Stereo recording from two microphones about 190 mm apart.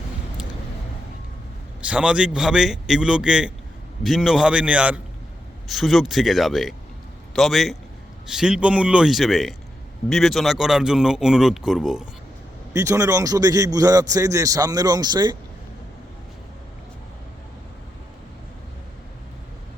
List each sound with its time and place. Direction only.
1.8 s speech: 5° right (ahead or behind)
12.7 s a man's voice: 15° right (ahead or behind)